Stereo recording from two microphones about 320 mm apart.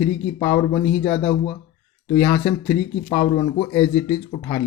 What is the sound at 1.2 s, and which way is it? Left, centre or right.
Speech, centre.